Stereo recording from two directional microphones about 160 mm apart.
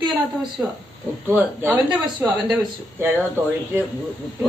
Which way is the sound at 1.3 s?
10° right (ahead or behind).